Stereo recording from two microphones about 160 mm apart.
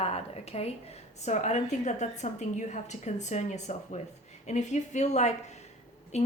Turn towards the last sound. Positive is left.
turn(degrees=45)  # may be behind; listen again after turning